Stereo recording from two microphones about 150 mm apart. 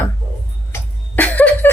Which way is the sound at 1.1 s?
10° left (ahead or behind).